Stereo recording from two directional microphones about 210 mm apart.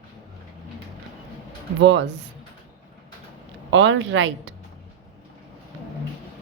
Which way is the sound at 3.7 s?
60° right (ahead or behind).